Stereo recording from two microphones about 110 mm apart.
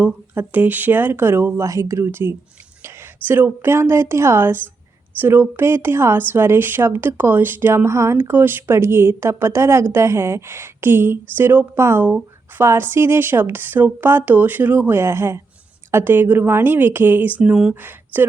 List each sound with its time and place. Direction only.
0.0 s speech: 15° right (ahead or behind)